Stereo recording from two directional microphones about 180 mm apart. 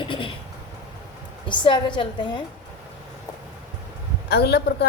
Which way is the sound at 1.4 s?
25° left (ahead or behind).